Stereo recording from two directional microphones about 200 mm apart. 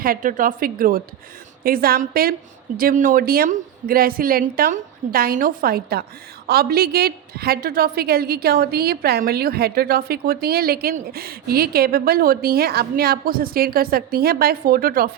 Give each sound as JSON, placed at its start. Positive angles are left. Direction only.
{"t": 0.0, "sound": "a woman's voice", "side_deg": -45}